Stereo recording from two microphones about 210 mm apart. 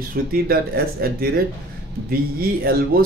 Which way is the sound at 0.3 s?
45° right (ahead or behind).